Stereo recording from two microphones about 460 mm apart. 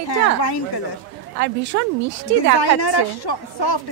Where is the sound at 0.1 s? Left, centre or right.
Left.